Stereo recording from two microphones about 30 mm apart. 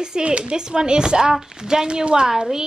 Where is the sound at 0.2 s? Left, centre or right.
Right.